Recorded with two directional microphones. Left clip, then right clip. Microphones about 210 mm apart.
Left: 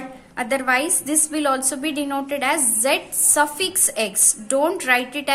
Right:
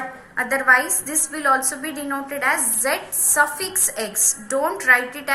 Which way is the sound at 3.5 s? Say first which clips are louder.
Left 3 dB; 90° left.